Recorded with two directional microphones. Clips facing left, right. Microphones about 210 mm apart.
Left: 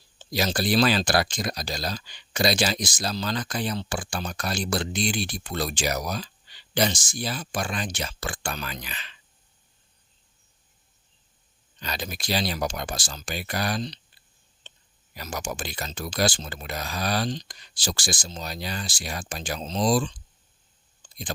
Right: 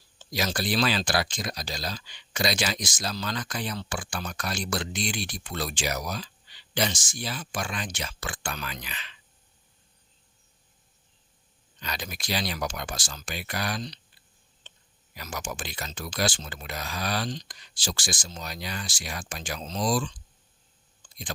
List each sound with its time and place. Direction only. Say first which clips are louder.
0.2 s speech: left 3 dB; 30° left (ahead or behind)
11.8 s speech: left 3 dB; 30° left (ahead or behind)
15.1 s speech: left 3 dB; 35° left (ahead or behind)